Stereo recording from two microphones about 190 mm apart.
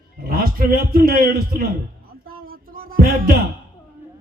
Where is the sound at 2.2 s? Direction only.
50° right (ahead or behind).